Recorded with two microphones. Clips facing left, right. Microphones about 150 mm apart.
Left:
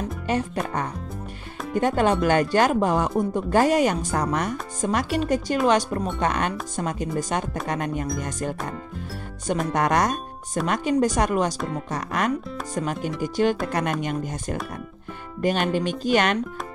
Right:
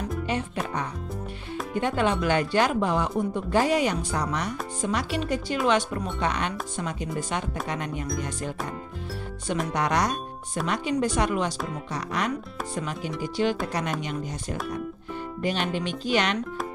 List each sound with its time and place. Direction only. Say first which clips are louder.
0.3 s music: left 5 dB; 45° left (ahead or behind)
1.8 s speech: left 4 dB; 40° left (ahead or behind)
9.8 s speech: left 4 dB; 50° left (ahead or behind)
15.4 s speech: left 5 dB; 45° left (ahead or behind)